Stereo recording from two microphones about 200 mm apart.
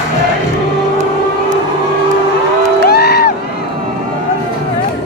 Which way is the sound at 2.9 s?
50° left (ahead or behind).